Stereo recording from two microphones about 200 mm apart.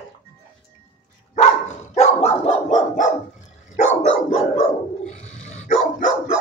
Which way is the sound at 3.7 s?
35° left (ahead or behind).